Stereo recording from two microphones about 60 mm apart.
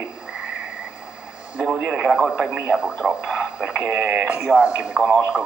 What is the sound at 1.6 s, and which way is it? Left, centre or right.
Radio, centre.